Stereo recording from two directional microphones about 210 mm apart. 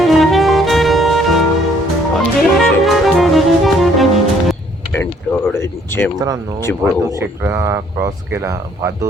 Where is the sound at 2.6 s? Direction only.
Centre (ahead or behind).